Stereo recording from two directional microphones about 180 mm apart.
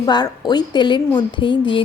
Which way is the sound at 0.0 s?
20° left (ahead or behind).